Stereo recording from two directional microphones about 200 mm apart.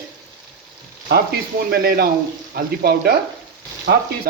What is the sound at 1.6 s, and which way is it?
Frying, 50° right (ahead or behind).